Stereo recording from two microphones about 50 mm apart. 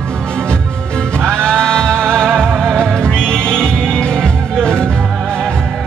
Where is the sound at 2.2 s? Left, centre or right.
Right.